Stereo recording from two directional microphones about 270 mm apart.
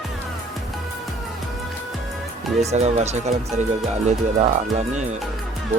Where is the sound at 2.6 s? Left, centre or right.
Right.